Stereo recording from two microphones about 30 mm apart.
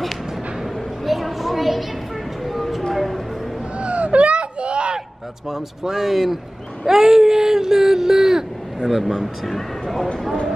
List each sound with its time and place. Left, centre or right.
1.0 s a sound: centre
3.8 s whimper: right
5.5 s speech: centre
8.8 s speech: centre